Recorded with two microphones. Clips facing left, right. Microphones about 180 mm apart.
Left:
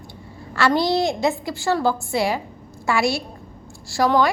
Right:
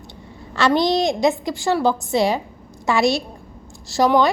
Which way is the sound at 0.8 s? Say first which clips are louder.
Right 2 dB; 15° right (ahead or behind).